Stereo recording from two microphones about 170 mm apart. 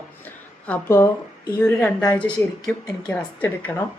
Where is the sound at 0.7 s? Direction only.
15° left (ahead or behind).